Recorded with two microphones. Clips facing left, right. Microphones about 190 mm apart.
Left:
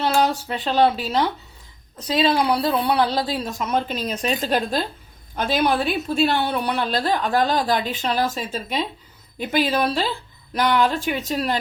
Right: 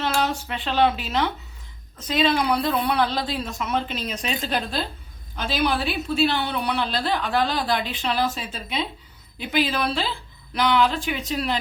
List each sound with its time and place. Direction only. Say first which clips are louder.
0.0 s a woman's voice: left 4 dB; 35° left (ahead or behind)